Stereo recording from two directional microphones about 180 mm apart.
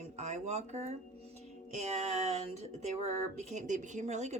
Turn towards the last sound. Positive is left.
turn(degrees=-40)  # may be behind; listen again after turning